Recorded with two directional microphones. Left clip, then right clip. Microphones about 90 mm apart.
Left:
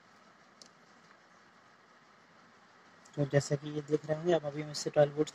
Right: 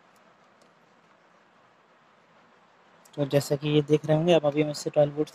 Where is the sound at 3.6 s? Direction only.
30° right (ahead or behind).